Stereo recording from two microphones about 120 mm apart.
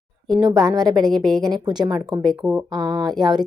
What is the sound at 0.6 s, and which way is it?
Speech, 35° right (ahead or behind).